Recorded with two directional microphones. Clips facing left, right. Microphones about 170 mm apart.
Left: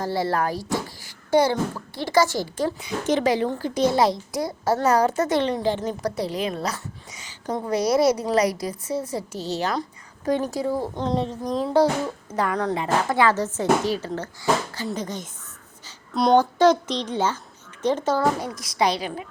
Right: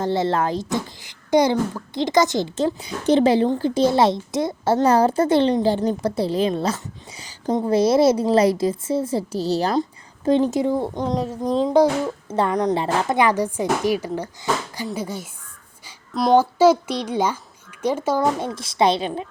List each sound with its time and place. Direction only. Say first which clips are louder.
0.0 s a child's voice: right 3 dB; 25° right (ahead or behind)
10.2 s a woman's voice: right 5 dB; 25° right (ahead or behind)
11.1 s a woman's voice: left 2 dB; 5° right (ahead or behind)
11.4 s a woman's voice: right 4 dB; 30° right (ahead or behind)
13.1 s speech: right 2 dB; 15° right (ahead or behind)
18.3 s a woman's voice: right 3 dB; 25° right (ahead or behind)